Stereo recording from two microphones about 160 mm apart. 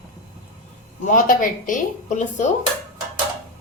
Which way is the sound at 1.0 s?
55° left (ahead or behind).